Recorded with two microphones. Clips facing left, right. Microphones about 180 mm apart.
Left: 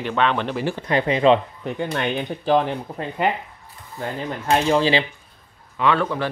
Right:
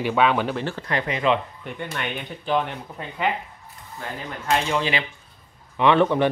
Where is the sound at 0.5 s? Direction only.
15° left (ahead or behind); by 3.0 s 35° left (ahead or behind).